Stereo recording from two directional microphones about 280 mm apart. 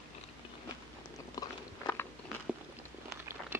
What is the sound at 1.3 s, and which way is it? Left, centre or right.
Biting, centre.